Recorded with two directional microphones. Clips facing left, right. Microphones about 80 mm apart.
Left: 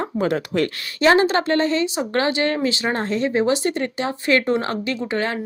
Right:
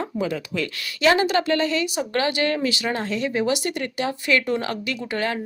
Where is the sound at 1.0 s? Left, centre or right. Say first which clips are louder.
Left 3 dB; left.